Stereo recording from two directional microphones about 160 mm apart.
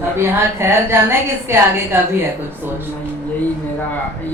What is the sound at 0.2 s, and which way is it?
A woman's voice, 15° right (ahead or behind).